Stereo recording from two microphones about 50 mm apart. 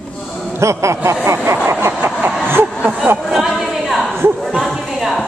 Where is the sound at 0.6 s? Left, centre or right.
Right.